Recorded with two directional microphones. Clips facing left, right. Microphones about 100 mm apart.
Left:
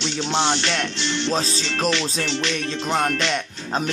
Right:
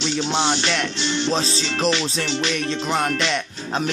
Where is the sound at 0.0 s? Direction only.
15° right (ahead or behind).